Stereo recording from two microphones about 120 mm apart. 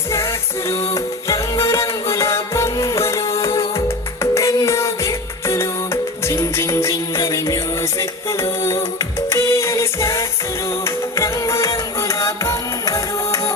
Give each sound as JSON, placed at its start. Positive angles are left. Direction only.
{"t": 0.7, "sound": "music", "side_deg": 25}